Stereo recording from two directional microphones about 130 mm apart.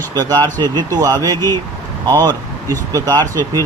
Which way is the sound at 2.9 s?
25° right (ahead or behind).